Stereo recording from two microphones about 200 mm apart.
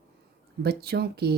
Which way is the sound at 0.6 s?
50° right (ahead or behind).